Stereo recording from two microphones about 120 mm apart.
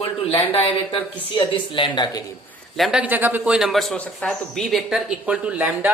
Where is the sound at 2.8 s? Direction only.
10° right (ahead or behind).